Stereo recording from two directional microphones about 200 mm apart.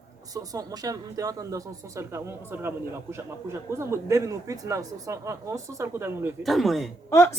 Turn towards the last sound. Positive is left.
turn(degrees=15)  # may be behind; listen again after turning